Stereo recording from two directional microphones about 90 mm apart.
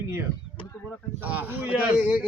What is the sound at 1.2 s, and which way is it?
Speech, 20° right (ahead or behind).